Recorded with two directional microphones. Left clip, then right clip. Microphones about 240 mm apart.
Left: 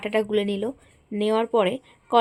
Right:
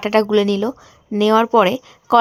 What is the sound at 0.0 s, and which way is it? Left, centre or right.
A woman's voice, right.